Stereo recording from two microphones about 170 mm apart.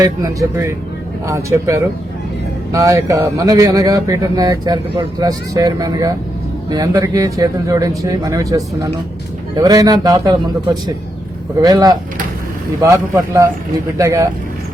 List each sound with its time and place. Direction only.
0.0 s speech: 20° right (ahead or behind)